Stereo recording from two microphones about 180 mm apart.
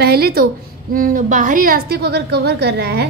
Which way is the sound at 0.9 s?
50° right (ahead or behind).